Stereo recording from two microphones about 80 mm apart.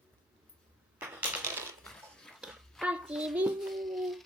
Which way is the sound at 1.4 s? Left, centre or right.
Right.